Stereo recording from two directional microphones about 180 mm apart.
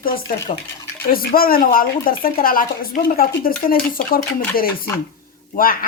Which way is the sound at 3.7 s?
55° left (ahead or behind).